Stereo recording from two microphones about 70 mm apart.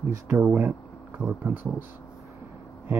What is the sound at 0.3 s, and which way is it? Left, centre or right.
Speech, right.